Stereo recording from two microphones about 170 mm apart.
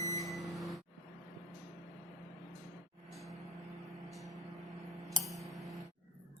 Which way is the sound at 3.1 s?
Centre (ahead or behind).